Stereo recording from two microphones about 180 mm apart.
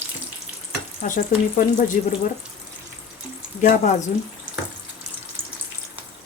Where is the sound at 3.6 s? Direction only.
45° left (ahead or behind).